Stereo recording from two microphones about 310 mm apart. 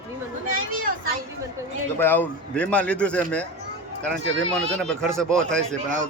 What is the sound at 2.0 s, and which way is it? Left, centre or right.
Speech, centre.